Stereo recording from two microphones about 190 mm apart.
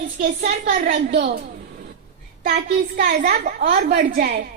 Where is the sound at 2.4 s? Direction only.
50° right (ahead or behind).